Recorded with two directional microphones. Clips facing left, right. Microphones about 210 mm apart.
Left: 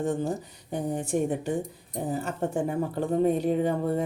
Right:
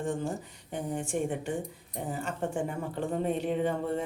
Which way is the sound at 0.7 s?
40° left (ahead or behind).